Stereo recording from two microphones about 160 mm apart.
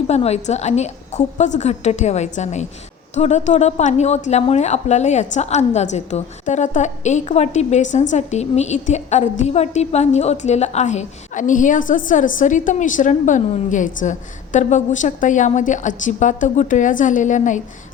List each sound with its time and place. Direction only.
0.1 s a woman's voice: 40° left (ahead or behind)